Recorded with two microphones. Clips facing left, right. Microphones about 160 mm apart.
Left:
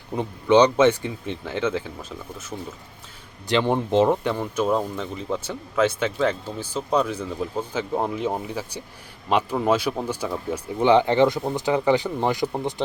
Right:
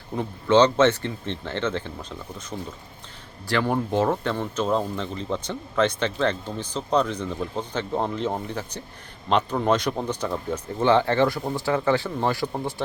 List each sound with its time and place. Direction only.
0.2 s speech: 15° left (ahead or behind)
3.5 s speech: 20° left (ahead or behind)